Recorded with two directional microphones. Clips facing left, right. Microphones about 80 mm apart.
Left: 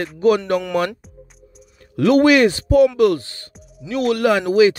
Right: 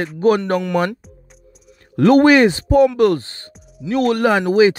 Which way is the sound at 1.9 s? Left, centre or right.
Right.